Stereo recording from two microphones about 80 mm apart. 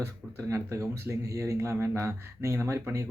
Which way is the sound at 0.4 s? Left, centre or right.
Right.